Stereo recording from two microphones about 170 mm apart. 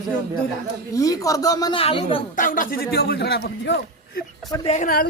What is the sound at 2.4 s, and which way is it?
A man's voice, 55° left (ahead or behind).